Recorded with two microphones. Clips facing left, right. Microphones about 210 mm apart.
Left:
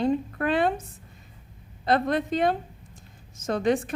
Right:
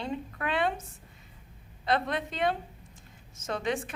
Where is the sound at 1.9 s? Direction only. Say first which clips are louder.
Left 6 dB; 40° left (ahead or behind).